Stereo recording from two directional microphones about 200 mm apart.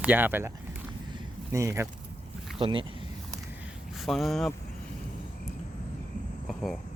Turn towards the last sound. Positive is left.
turn(degrees=0)  # may be behind; listen again after turning